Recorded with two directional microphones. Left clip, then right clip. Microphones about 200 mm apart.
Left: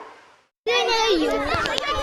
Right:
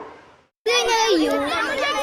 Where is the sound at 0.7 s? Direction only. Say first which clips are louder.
Right 1 dB; 55° right (ahead or behind).